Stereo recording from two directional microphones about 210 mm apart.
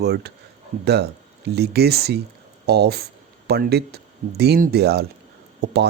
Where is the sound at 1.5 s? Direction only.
50° right (ahead or behind).